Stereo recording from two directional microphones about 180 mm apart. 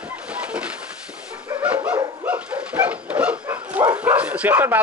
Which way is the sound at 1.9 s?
10° right (ahead or behind).